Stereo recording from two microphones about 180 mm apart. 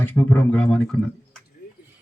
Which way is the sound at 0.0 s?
10° left (ahead or behind).